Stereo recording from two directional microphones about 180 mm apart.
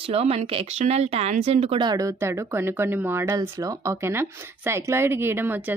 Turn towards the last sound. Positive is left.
turn(degrees=-10)  # may be behind; listen again after turning